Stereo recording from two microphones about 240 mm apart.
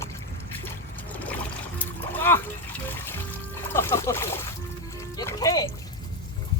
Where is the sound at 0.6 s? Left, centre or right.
Centre.